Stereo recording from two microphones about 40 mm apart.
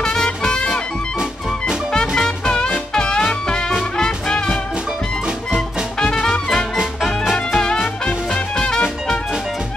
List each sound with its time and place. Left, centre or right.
0.0 s music: centre
1.9 s music: centre
6.2 s music: centre